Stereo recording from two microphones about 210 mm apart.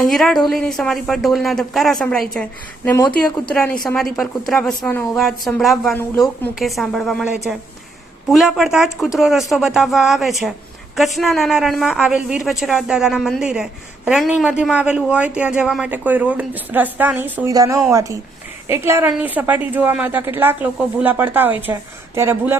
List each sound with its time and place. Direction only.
0.1 s a woman's voice: centre (ahead or behind)